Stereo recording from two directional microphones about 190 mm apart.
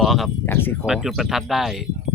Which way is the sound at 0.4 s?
10° left (ahead or behind).